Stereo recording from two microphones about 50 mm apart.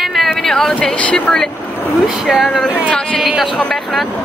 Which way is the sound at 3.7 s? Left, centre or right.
Centre.